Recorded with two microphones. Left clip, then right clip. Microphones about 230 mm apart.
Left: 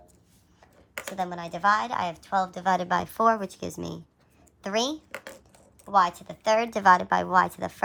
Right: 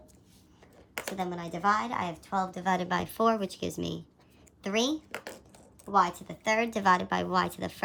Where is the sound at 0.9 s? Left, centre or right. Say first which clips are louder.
Left 1 dB; centre.